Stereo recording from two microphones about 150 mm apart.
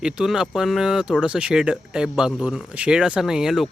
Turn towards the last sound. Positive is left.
turn(degrees=-5)  # may be behind; listen again after turning